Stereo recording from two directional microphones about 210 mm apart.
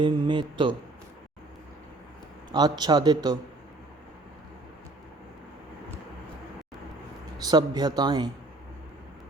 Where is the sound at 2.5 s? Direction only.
20° right (ahead or behind).